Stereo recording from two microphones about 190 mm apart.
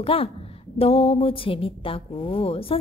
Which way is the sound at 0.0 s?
30° left (ahead or behind).